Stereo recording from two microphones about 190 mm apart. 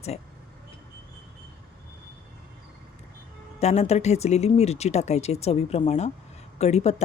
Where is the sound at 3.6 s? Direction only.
35° left (ahead or behind).